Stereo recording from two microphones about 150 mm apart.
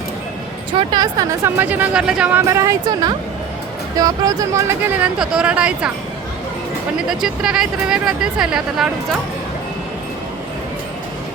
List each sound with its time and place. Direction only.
0.8 s speech: 30° right (ahead or behind); by 5.9 s 10° right (ahead or behind)
7.1 s speech: 5° right (ahead or behind)